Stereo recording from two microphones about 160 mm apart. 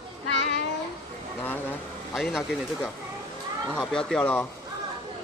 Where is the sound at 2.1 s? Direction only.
Centre (ahead or behind).